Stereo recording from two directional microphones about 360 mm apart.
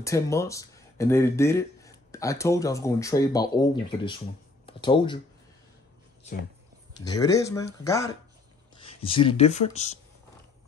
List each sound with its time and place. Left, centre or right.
0.0 s speech: centre
7.0 s speech: centre